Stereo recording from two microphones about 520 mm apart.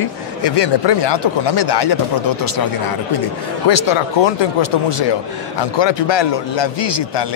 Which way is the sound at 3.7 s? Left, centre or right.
Left.